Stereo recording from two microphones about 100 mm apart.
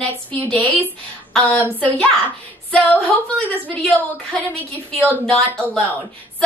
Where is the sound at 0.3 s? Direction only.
15° left (ahead or behind).